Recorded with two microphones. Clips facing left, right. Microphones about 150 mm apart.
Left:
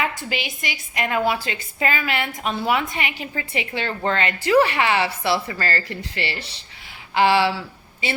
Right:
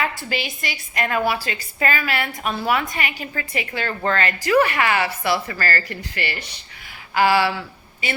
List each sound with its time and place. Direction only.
0.0 s a woman's voice: 15° left (ahead or behind)